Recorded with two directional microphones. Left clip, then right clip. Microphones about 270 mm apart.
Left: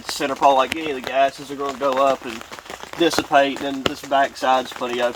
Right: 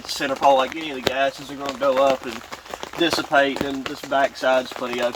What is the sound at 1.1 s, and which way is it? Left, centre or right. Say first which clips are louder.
Speech: left 1 dB; right.